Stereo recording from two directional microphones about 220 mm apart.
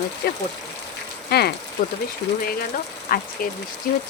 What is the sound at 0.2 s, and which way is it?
Speech, 45° left (ahead or behind).